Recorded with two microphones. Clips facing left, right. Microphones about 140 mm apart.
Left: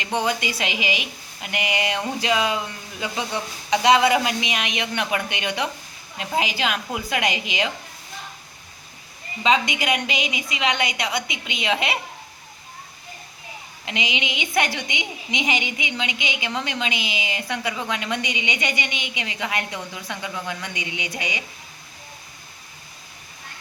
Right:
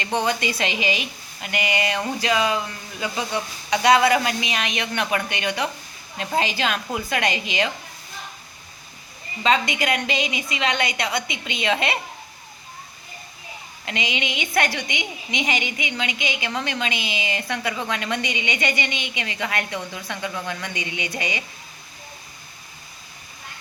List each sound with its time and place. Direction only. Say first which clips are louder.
0.0 s a woman's voice: right 1 dB; 10° left (ahead or behind)
9.4 s a woman's voice: even; 15° left (ahead or behind)
13.8 s a woman's voice: even; 15° left (ahead or behind)